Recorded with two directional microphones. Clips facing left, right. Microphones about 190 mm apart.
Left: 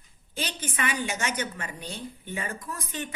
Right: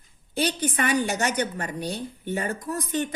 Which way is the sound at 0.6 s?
40° right (ahead or behind).